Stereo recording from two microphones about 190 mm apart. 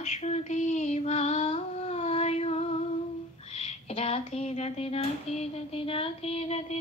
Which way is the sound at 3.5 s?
35° left (ahead or behind).